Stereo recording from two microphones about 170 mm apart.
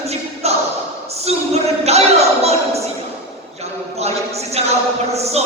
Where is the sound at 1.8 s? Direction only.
40° right (ahead or behind).